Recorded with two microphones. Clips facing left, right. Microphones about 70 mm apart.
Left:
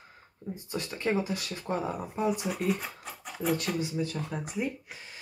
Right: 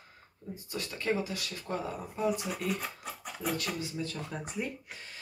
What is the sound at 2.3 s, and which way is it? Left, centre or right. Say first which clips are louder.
Speech: left 4 dB; centre.